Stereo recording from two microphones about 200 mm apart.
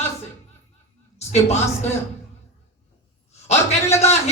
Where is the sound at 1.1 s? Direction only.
35° left (ahead or behind).